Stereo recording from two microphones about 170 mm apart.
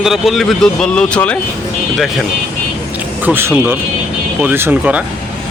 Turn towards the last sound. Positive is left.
turn(degrees=-10)  # may be behind; listen again after turning